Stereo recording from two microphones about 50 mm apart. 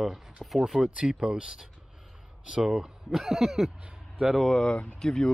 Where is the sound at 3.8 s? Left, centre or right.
Centre.